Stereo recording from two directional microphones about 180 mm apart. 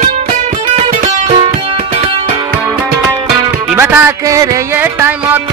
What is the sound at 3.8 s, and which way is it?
Music, 15° right (ahead or behind).